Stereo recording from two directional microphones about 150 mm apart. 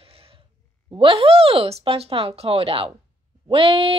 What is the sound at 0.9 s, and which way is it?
Speech, 35° right (ahead or behind).